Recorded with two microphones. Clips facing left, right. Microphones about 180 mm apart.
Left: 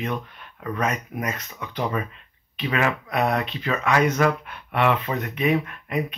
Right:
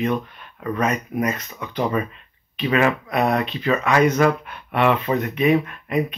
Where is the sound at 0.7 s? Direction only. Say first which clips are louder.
Right 4 dB; 10° right (ahead or behind).